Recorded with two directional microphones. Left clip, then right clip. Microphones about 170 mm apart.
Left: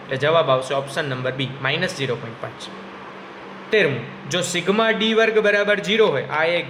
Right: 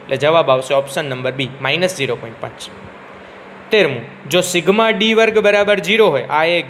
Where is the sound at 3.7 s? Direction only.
30° right (ahead or behind).